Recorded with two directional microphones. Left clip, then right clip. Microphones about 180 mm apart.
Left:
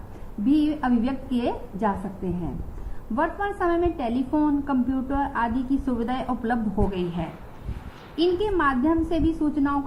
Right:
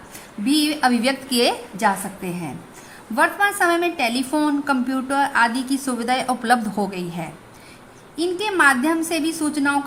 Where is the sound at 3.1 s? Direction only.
45° right (ahead or behind).